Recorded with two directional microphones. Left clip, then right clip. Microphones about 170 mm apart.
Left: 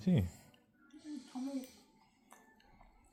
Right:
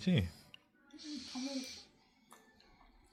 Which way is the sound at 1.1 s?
20° left (ahead or behind).